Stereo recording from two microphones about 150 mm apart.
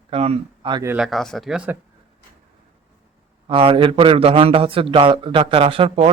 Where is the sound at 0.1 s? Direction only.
40° right (ahead or behind).